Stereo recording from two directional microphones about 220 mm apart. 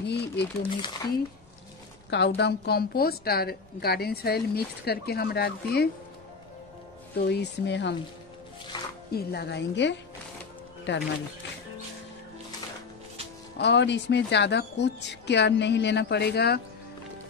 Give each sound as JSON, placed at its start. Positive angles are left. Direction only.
{"t": 0.0, "sound": "a woman's voice", "side_deg": 50}
{"t": 0.6, "sound": "speech", "side_deg": 20}
{"t": 2.0, "sound": "a woman's voice", "side_deg": 50}
{"t": 7.2, "sound": "a woman's voice", "side_deg": 50}
{"t": 8.7, "sound": "music", "side_deg": 20}
{"t": 9.1, "sound": "a woman's voice", "side_deg": 45}
{"t": 13.6, "sound": "a woman's voice", "side_deg": 50}